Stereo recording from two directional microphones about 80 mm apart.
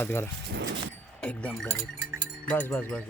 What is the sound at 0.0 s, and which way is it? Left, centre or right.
Speech, left.